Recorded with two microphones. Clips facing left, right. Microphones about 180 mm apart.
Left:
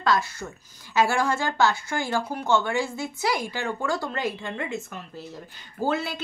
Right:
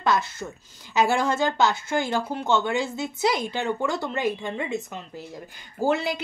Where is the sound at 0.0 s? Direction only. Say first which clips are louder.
Even; 20° right (ahead or behind).